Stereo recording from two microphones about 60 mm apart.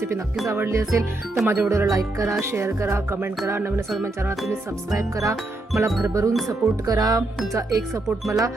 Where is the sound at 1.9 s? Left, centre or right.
Right.